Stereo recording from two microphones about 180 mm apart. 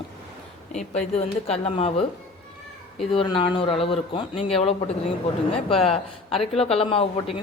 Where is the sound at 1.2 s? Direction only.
35° left (ahead or behind).